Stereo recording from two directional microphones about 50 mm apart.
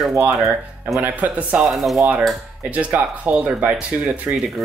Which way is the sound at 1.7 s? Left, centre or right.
Centre.